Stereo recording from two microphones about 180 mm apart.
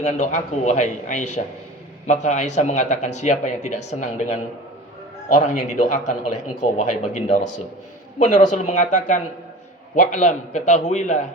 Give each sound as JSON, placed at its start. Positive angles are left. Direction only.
{"t": 0.0, "sound": "a man's voice", "side_deg": 40}